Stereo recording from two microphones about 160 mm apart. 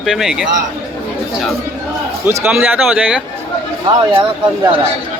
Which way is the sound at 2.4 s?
5° right (ahead or behind).